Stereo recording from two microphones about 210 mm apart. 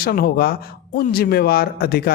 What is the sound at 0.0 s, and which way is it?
Speech, 45° left (ahead or behind).